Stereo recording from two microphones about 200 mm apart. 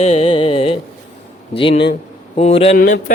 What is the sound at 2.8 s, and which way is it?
Speech, 45° left (ahead or behind).